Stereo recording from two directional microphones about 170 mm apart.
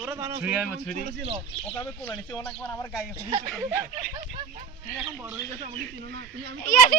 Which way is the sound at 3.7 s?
25° right (ahead or behind).